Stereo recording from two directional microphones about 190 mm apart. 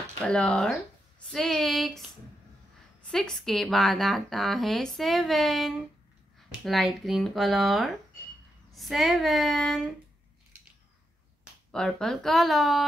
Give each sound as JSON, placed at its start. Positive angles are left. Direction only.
{"t": 0.2, "sound": "a woman's voice", "side_deg": 5}
{"t": 3.1, "sound": "a woman's voice", "side_deg": 0}
{"t": 11.7, "sound": "a woman's voice", "side_deg": 5}